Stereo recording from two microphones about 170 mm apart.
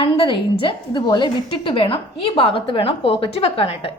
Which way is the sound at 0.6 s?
30° left (ahead or behind).